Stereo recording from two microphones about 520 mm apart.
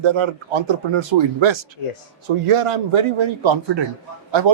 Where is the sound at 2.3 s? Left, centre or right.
Right.